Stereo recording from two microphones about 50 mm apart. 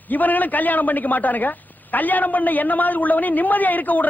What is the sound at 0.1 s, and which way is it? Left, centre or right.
A man's voice, left.